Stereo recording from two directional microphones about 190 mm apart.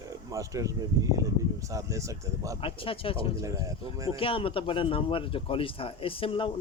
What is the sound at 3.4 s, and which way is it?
Speech, 15° right (ahead or behind).